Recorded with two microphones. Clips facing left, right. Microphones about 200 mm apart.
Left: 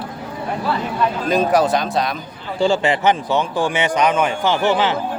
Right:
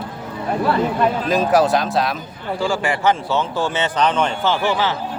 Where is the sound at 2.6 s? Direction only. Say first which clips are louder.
Left 5 dB; 25° left (ahead or behind).